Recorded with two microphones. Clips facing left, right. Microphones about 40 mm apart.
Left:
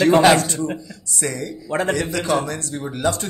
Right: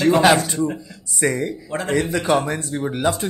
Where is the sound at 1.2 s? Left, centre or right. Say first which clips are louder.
Right 5 dB; right.